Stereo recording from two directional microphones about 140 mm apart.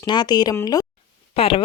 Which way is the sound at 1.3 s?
40° left (ahead or behind).